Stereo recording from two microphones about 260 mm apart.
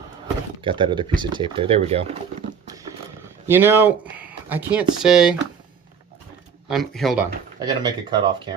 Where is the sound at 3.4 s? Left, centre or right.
Centre.